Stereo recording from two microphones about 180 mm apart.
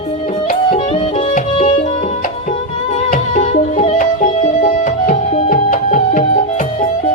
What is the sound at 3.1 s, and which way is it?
Music, 40° left (ahead or behind).